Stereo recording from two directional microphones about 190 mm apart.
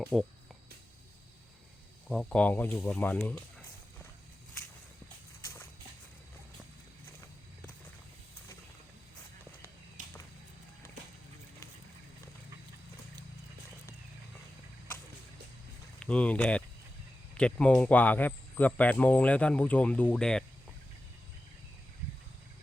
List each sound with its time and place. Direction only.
0.0 s speech: centre (ahead or behind)
2.0 s speech: 5° left (ahead or behind)
10.0 s a sound: 40° right (ahead or behind)
16.0 s speech: 5° left (ahead or behind)